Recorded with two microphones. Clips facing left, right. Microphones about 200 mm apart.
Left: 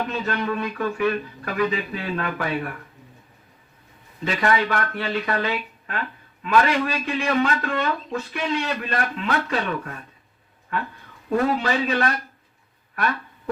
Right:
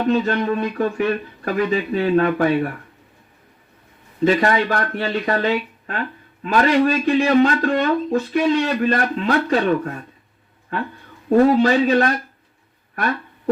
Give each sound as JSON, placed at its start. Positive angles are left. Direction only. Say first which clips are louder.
{"t": 0.1, "sound": "a man's voice", "louder": "right 7 dB", "side_deg": -35}
{"t": 4.2, "sound": "a man's voice", "louder": "right 6 dB", "side_deg": -35}
{"t": 11.3, "sound": "a man's voice", "louder": "right 8 dB", "side_deg": -35}